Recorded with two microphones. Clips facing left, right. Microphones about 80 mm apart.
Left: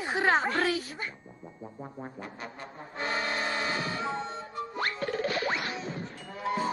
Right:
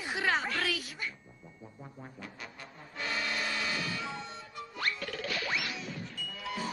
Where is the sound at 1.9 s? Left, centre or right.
Left.